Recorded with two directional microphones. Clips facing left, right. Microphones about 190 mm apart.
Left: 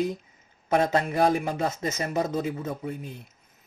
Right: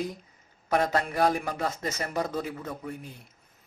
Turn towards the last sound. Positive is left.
turn(degrees=20)  # may be behind; listen again after turning